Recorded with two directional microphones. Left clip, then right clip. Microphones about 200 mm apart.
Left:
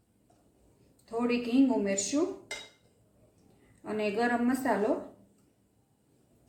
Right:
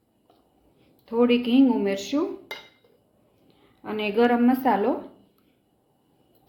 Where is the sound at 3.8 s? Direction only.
30° right (ahead or behind).